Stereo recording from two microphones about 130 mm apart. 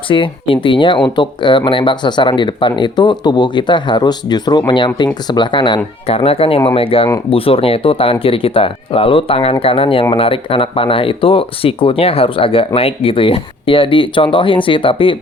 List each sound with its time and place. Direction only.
0.1 s speech: 40° left (ahead or behind)